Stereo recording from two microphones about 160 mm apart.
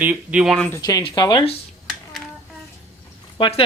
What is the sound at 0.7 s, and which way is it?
Speech, 20° left (ahead or behind).